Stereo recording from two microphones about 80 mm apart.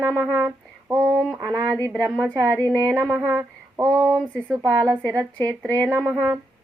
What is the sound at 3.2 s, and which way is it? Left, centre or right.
Child singing, right.